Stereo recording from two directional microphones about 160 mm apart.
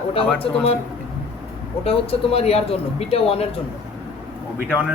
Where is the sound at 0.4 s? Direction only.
35° left (ahead or behind).